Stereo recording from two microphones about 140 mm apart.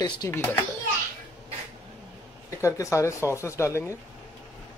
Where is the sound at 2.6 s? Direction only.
20° left (ahead or behind).